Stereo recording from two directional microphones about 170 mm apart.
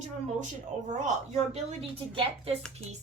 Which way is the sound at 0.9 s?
45° right (ahead or behind).